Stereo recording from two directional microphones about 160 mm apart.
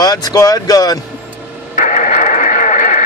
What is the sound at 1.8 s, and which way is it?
Radio, 50° left (ahead or behind).